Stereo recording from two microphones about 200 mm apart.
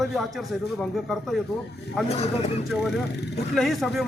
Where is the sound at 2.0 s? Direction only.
30° left (ahead or behind).